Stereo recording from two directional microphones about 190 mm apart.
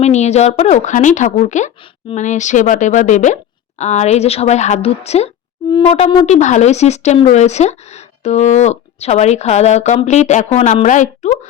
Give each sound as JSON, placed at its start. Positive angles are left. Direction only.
{"t": 0.0, "sound": "speech", "side_deg": 35}